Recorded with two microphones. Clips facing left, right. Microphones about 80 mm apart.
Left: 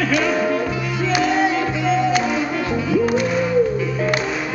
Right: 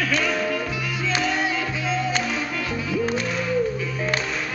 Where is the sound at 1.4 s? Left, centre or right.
Left.